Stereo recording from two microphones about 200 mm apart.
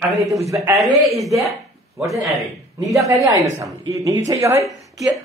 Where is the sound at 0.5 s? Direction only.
15° right (ahead or behind).